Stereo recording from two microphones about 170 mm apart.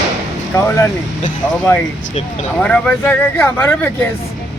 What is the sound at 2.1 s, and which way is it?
Speech, 35° left (ahead or behind).